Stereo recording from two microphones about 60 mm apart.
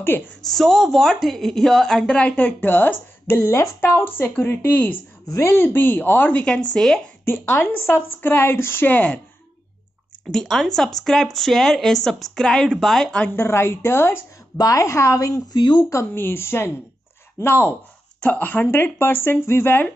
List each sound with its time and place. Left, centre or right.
0.0 s a woman's voice: left
0.5 s a woman's voice: centre; by 3.7 s left
3.8 s a woman's voice: left
6.4 s a woman's voice: centre
7.2 s a woman's voice: left
10.3 s a woman's voice: centre
13.3 s a woman's voice: left
14.6 s a woman's voice: left
15.1 s speech: left
16.2 s a woman's voice: left
18.2 s speech: left
18.7 s a woman's voice: left